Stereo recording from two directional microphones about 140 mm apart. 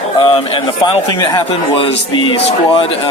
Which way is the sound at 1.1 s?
30° left (ahead or behind).